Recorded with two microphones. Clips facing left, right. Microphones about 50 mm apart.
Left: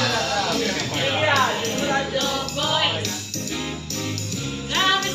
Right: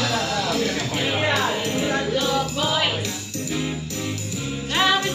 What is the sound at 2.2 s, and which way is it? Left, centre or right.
Music, centre.